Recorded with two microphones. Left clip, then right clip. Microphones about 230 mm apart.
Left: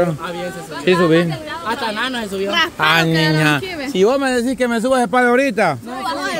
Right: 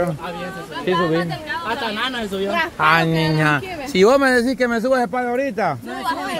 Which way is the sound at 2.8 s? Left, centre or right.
Centre.